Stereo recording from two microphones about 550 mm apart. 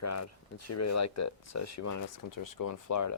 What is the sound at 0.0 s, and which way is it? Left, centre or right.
Speech, left.